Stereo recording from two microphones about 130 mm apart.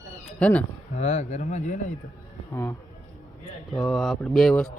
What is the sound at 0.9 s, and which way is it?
Speech, 60° left (ahead or behind).